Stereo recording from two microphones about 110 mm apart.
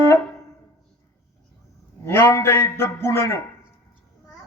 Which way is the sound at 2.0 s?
20° left (ahead or behind).